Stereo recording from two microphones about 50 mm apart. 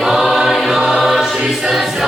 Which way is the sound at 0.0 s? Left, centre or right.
Centre.